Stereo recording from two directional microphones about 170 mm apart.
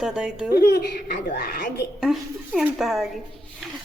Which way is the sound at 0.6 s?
70° left (ahead or behind).